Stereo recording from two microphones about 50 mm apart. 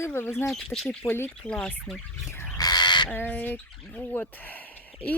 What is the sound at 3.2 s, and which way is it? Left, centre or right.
Speech, left.